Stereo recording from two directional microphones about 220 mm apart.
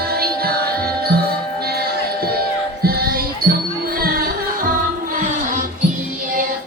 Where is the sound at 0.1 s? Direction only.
45° right (ahead or behind).